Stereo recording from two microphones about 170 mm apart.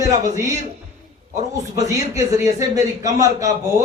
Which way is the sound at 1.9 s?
20° right (ahead or behind).